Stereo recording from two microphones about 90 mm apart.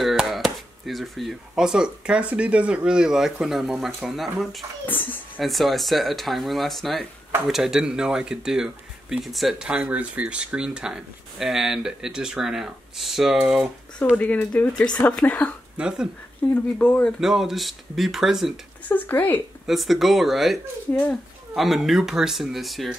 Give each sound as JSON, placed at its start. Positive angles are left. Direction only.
{"t": 0.0, "sound": "a sound", "side_deg": 0}
{"t": 1.5, "sound": "speech", "side_deg": -10}
{"t": 4.8, "sound": "speech", "side_deg": 20}
{"t": 5.4, "sound": "speech", "side_deg": 0}
{"t": 14.1, "sound": "speech", "side_deg": 15}
{"t": 15.8, "sound": "speech", "side_deg": -10}
{"t": 16.4, "sound": "speech", "side_deg": 15}
{"t": 17.2, "sound": "speech", "side_deg": -5}
{"t": 18.9, "sound": "speech", "side_deg": 20}
{"t": 19.6, "sound": "speech", "side_deg": 0}